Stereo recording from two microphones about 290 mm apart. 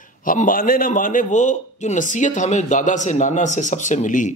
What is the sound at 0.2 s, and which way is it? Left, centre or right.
Speech, left.